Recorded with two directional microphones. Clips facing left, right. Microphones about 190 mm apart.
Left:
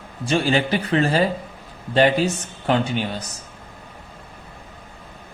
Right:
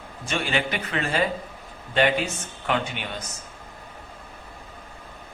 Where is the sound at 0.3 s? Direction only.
35° left (ahead or behind).